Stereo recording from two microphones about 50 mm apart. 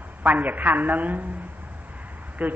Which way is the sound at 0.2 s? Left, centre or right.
Right.